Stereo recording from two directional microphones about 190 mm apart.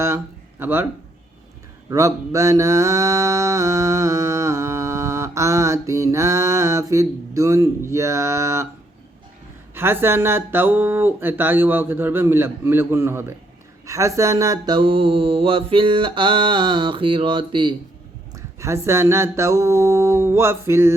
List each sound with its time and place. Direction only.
0.6 s speech: 10° right (ahead or behind)
1.9 s mantra: 15° right (ahead or behind)
9.7 s speech: 10° right (ahead or behind)
13.8 s mantra: 15° right (ahead or behind)
18.3 s speech: 15° right (ahead or behind)